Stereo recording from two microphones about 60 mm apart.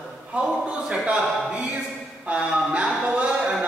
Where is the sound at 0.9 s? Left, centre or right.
Centre.